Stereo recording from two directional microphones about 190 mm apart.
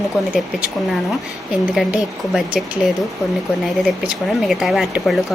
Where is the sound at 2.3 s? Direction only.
Centre (ahead or behind).